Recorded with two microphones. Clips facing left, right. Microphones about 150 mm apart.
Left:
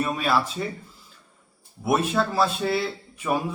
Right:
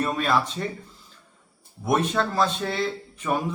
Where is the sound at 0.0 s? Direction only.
5° left (ahead or behind).